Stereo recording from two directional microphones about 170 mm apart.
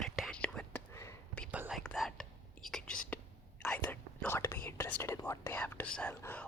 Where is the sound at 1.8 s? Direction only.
Centre (ahead or behind).